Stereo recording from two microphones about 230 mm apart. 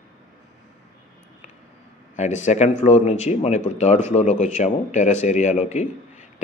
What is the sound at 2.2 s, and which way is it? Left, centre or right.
Speech, left.